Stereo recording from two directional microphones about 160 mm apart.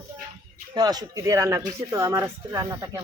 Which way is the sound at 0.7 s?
25° right (ahead or behind).